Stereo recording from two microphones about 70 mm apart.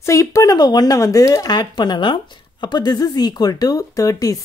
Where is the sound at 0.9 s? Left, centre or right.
Left.